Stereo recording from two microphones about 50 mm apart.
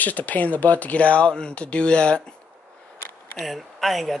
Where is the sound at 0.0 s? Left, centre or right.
Left.